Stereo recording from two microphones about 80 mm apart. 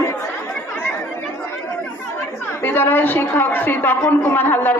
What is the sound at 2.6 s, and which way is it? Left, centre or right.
Speech, left.